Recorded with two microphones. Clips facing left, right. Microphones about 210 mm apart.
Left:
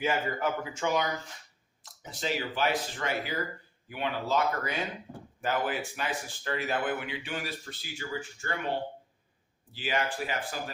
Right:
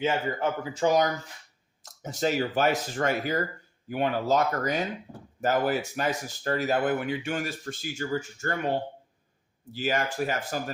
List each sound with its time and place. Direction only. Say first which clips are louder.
0.0 s speech: right 3 dB; 25° right (ahead or behind); by 8.7 s 40° right (ahead or behind)
9.7 s speech: right 4 dB; 45° right (ahead or behind)